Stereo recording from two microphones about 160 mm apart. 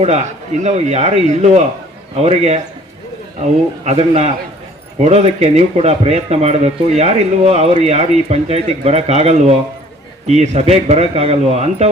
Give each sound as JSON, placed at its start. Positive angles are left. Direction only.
{"t": 0.6, "sound": "a man's voice", "side_deg": -45}